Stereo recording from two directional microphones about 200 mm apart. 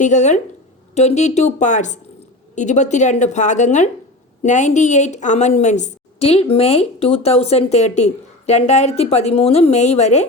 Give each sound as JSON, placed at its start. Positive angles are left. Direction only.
{"t": 0.0, "sound": "a woman's voice", "side_deg": 35}